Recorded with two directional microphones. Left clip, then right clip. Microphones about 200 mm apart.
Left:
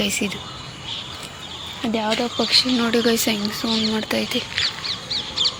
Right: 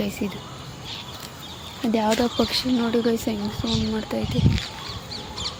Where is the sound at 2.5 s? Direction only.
10° right (ahead or behind).